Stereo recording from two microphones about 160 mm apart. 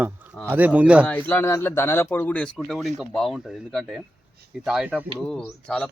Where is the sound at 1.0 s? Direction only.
10° left (ahead or behind).